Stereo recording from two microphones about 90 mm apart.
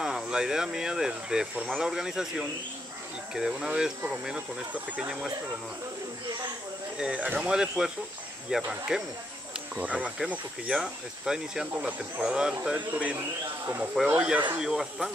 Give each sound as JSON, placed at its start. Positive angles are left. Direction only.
{"t": 0.0, "sound": "speech", "side_deg": -5}
{"t": 7.0, "sound": "speech", "side_deg": -15}